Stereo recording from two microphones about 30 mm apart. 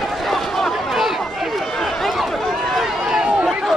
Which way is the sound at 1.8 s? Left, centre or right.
Centre.